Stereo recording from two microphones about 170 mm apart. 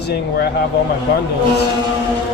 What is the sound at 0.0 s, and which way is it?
Speech, 70° left (ahead or behind).